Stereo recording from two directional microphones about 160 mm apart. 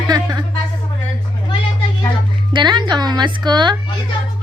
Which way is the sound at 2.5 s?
30° right (ahead or behind).